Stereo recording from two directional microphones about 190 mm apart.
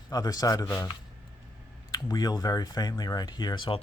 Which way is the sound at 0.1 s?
20° left (ahead or behind).